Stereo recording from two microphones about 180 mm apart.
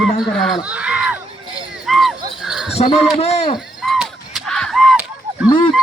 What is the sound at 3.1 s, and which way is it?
Speech, 35° left (ahead or behind).